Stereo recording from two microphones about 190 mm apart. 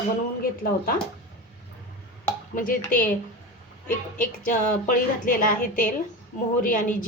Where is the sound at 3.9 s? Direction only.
45° left (ahead or behind).